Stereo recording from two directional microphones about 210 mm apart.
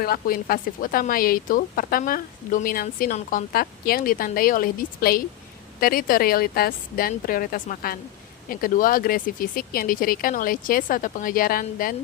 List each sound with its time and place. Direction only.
0.0 s speech: 45° left (ahead or behind)